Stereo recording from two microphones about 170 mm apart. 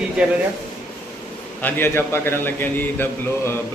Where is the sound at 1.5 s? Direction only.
10° left (ahead or behind).